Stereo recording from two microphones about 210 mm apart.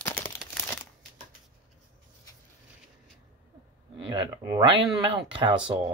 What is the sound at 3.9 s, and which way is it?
Speech, 20° right (ahead or behind).